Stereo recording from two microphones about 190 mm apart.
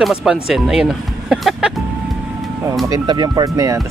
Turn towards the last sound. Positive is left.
turn(degrees=-15)  # may be behind; listen again after turning